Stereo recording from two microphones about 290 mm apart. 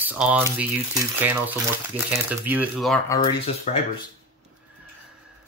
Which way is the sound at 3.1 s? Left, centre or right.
Centre.